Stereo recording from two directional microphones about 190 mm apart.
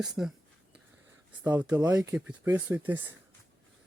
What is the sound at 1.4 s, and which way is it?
Speech, 10° right (ahead or behind).